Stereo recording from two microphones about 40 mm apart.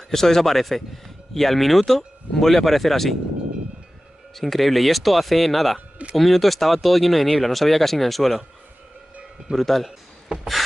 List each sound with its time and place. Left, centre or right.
0.1 s speech: centre
4.4 s speech: centre
9.6 s speech: centre
10.3 s a sound: right